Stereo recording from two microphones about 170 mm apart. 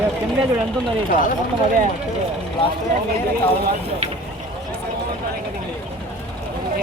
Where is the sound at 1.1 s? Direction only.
50° left (ahead or behind).